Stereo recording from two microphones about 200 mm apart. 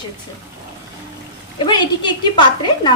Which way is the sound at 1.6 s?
20° left (ahead or behind).